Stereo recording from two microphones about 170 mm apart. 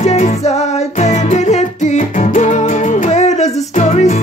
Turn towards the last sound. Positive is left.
turn(degrees=45)  # may be behind; listen again after turning